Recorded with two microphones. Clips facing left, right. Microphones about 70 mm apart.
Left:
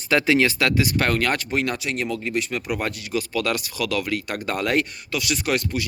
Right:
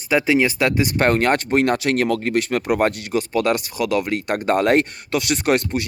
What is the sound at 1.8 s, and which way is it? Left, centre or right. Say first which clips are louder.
Speech: right 7 dB; right.